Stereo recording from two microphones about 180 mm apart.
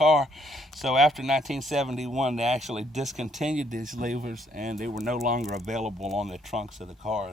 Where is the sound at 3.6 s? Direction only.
45° right (ahead or behind).